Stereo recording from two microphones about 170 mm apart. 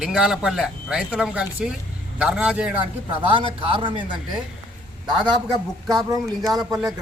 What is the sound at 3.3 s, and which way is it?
Speech, 30° right (ahead or behind).